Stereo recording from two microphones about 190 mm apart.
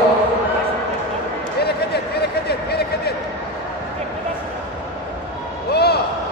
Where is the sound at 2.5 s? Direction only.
55° left (ahead or behind).